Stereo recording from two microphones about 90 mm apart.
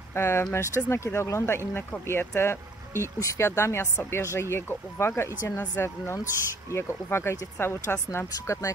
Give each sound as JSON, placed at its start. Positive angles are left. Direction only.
{"t": 0.1, "sound": "speech", "side_deg": 30}